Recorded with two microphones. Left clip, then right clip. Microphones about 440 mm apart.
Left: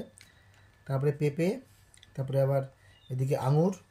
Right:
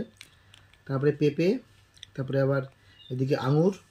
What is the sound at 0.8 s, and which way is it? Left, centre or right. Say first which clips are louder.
Speech: right 5 dB; left.